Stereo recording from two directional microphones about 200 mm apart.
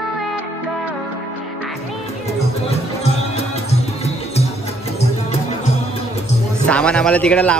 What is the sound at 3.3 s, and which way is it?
Music, 30° left (ahead or behind).